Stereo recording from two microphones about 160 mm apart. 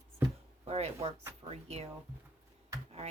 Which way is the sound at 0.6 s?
40° right (ahead or behind).